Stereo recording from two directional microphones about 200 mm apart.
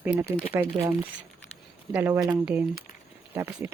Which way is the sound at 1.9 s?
10° right (ahead or behind).